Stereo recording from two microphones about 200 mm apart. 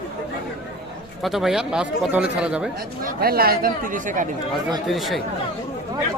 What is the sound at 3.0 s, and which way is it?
Speech, 50° right (ahead or behind).